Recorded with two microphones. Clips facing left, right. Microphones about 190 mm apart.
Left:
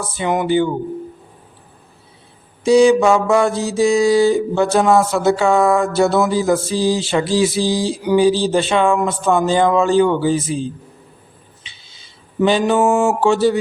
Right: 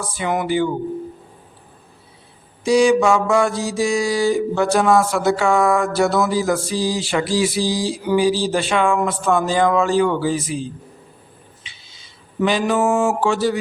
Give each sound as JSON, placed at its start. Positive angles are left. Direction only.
{"t": 0.1, "sound": "mantra", "side_deg": 25}
{"t": 2.6, "sound": "mantra", "side_deg": 25}
{"t": 12.4, "sound": "mantra", "side_deg": 25}